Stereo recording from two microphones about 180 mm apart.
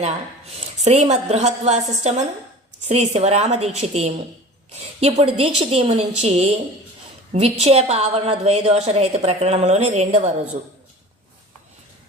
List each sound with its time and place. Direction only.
0.0 s a woman's voice: 35° right (ahead or behind)